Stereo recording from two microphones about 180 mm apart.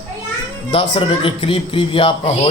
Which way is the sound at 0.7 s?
30° left (ahead or behind).